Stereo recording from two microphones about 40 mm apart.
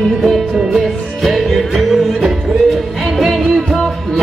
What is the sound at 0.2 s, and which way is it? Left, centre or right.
Music, centre.